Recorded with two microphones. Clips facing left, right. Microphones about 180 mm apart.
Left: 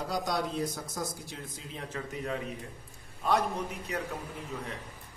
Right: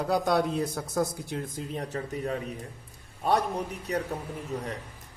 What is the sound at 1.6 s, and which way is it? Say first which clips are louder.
A man's voice: right 6 dB; 40° right (ahead or behind).